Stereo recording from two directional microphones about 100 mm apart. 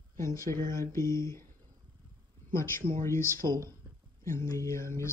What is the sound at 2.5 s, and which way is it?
Speech, 25° left (ahead or behind).